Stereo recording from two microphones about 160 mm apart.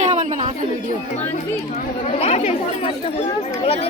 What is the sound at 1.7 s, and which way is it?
Speech, 40° left (ahead or behind).